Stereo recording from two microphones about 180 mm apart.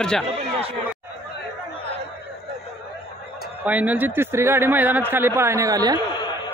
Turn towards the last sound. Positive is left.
turn(degrees=-20)  # may be behind; listen again after turning